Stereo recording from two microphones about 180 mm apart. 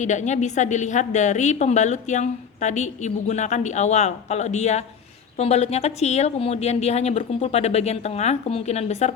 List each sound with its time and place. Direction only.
0.0 s a woman's voice: 40° left (ahead or behind)